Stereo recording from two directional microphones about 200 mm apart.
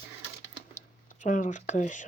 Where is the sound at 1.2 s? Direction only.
40° left (ahead or behind).